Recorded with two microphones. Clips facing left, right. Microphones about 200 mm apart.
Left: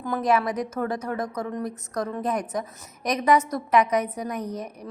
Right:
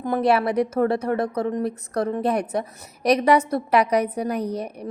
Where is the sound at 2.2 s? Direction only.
65° right (ahead or behind).